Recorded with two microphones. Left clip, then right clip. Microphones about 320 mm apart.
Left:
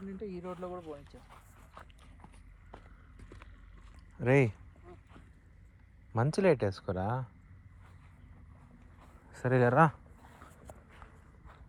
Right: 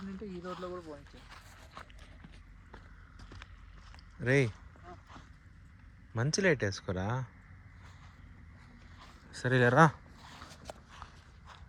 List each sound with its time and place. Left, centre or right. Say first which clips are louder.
0.3 s speech: right 1 dB; left
1.3 s a sound: right 4 dB; centre
4.2 s speech: left 2 dB; centre
6.1 s speech: left 2 dB; centre
9.6 s a sound: right 1 dB; centre
10.9 s walk: right 5 dB; centre